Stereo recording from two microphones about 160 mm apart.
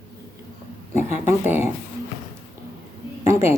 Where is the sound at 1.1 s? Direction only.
15° right (ahead or behind).